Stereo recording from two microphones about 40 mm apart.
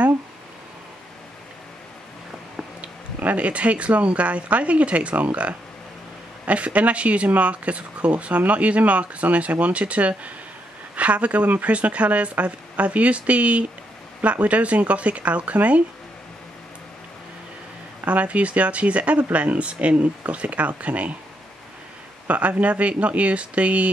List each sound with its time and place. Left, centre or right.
3.2 s speech: right
18.0 s speech: right
22.3 s speech: right